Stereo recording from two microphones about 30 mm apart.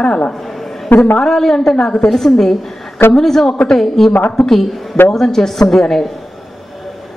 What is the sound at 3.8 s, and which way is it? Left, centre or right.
Speech, centre.